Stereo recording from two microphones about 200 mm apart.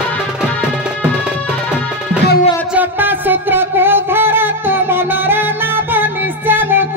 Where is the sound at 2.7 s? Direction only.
10° right (ahead or behind).